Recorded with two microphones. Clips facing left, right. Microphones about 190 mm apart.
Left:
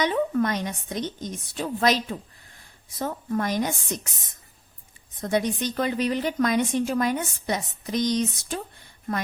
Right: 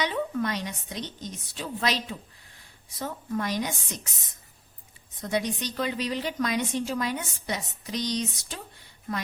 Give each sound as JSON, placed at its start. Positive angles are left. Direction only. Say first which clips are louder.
{"t": 0.0, "sound": "a woman's voice", "louder": "left 5 dB", "side_deg": 50}
{"t": 5.2, "sound": "a woman's voice", "louder": "left 4 dB", "side_deg": 50}